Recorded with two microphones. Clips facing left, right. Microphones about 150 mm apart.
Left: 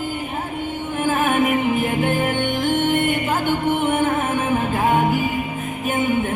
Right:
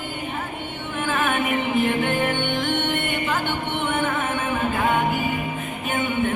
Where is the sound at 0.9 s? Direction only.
45° left (ahead or behind).